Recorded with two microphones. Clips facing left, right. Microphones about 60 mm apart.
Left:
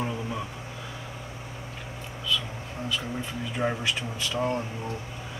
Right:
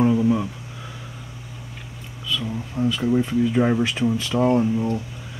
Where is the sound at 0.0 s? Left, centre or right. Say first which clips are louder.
Right 13 dB; centre.